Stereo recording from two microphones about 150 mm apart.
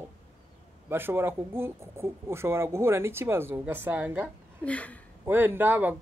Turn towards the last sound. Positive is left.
turn(degrees=-10)  # may be behind; listen again after turning